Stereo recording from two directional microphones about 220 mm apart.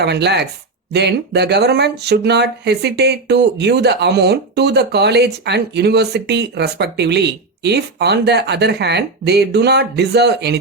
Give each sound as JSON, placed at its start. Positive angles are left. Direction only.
{"t": 0.0, "sound": "speech", "side_deg": -50}